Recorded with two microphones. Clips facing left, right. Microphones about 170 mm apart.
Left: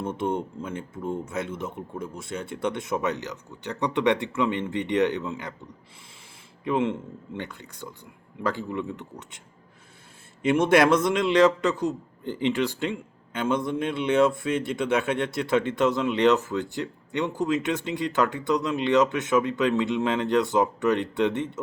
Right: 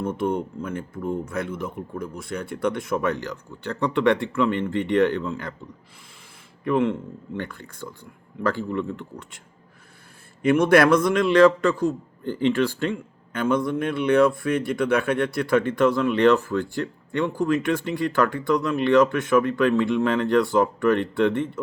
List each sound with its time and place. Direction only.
0.0 s a man's voice: 25° left (ahead or behind)
6.7 s a man's voice: 20° left (ahead or behind)
10.4 s a man's voice: 25° left (ahead or behind)